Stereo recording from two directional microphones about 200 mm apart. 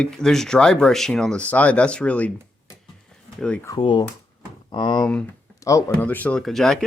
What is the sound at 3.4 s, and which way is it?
Speech, 5° left (ahead or behind).